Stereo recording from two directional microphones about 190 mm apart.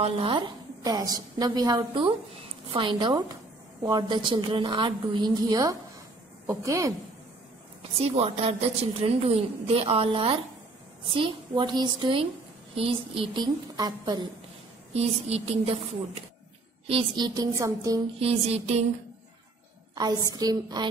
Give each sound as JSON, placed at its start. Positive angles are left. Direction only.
{"t": 0.0, "sound": "a woman's voice", "side_deg": -30}
{"t": 8.0, "sound": "a woman's voice", "side_deg": -35}
{"t": 14.9, "sound": "a woman's voice", "side_deg": -35}
{"t": 18.2, "sound": "a woman's voice", "side_deg": -30}
{"t": 20.0, "sound": "a woman's voice", "side_deg": -20}